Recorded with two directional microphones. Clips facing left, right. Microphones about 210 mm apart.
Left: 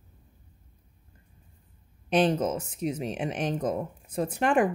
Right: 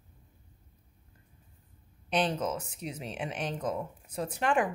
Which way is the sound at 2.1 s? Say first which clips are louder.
Left 6 dB; 50° left (ahead or behind).